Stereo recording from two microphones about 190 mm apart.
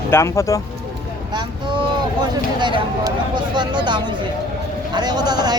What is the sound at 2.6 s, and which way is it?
Speech, 25° right (ahead or behind).